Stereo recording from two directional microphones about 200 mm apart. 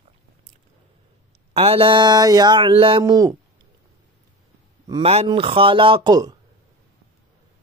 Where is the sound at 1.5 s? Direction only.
30° right (ahead or behind).